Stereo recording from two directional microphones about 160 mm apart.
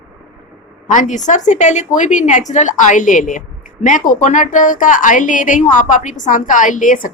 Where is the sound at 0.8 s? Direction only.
55° left (ahead or behind).